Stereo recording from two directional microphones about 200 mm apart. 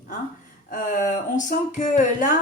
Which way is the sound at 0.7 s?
40° left (ahead or behind).